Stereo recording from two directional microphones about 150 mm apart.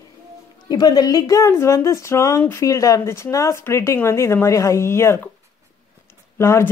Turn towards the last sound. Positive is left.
turn(degrees=15)  # may be behind; listen again after turning